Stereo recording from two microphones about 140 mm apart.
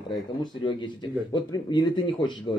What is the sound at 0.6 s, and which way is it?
Speech, 35° left (ahead or behind).